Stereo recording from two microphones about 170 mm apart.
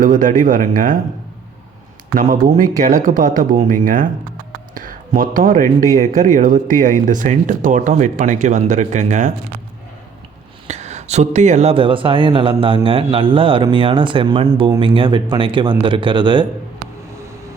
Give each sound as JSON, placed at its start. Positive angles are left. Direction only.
{"t": 0.0, "sound": "speech", "side_deg": -50}
{"t": 2.1, "sound": "speech", "side_deg": -55}
{"t": 10.7, "sound": "speech", "side_deg": -40}